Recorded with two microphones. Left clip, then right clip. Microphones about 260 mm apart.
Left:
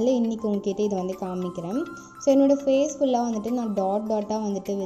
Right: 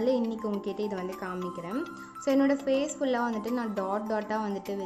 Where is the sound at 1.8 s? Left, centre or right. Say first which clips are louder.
Left 4 dB; centre.